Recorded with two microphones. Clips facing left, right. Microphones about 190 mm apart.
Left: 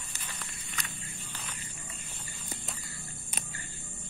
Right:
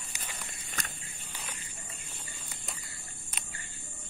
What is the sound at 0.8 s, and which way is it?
Walk, 45° right (ahead or behind).